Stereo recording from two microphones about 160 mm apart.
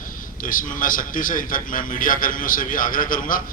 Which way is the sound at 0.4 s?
55° left (ahead or behind).